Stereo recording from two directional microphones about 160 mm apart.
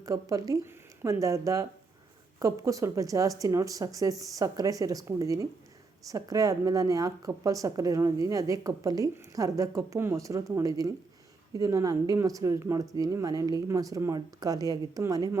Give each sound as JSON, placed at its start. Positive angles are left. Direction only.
{"t": 0.0, "sound": "a woman's voice", "side_deg": -20}